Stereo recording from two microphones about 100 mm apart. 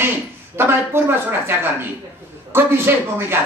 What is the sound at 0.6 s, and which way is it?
A man's voice, 25° right (ahead or behind).